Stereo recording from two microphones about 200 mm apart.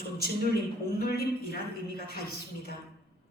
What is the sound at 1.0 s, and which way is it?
Speech, 50° left (ahead or behind).